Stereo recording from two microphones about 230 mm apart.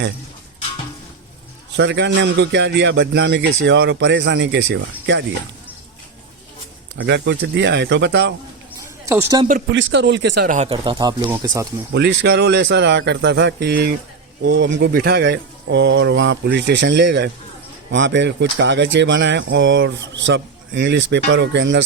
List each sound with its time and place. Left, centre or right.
1.7 s speech: right
7.0 s speech: right
9.0 s speech: centre
9.7 s speech: right
10.5 s speech: right
11.9 s speech: right